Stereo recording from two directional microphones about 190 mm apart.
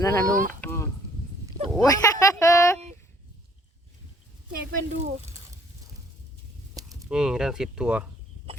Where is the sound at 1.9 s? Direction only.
15° left (ahead or behind).